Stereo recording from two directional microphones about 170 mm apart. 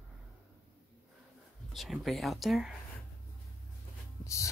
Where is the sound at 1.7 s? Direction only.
Centre (ahead or behind).